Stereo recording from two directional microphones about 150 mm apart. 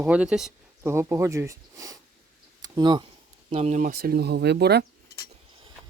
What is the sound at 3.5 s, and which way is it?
Speech, 50° right (ahead or behind).